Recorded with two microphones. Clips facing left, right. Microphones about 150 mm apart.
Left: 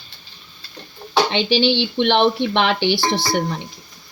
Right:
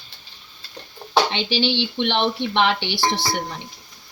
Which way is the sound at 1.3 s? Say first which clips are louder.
Left 5 dB; 75° left (ahead or behind).